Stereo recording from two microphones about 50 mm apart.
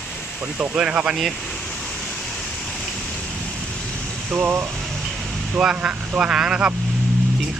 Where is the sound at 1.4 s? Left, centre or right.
Centre.